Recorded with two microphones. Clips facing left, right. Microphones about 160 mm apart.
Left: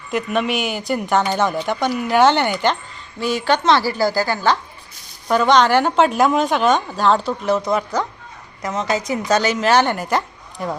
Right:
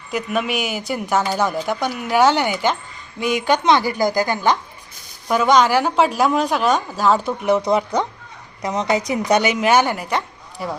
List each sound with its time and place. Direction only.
0.1 s a woman's voice: centre (ahead or behind)